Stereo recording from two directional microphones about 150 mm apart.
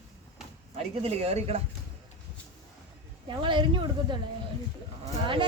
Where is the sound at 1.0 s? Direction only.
40° right (ahead or behind).